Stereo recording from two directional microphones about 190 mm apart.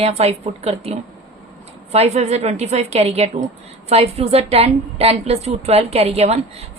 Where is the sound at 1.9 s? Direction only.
35° right (ahead or behind).